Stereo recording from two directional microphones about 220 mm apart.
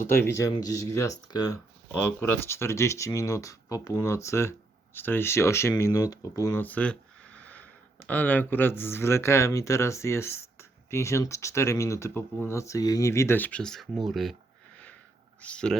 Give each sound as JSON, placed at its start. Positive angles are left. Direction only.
{"t": 0.3, "sound": "speech", "side_deg": 15}
{"t": 15.4, "sound": "speech", "side_deg": 5}